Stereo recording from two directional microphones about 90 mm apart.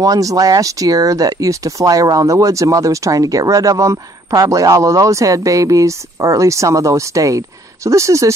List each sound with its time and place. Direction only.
0.0 s speech: 40° right (ahead or behind)